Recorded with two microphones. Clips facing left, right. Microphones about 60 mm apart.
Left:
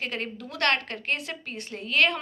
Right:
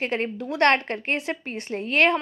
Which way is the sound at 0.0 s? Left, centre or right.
Right.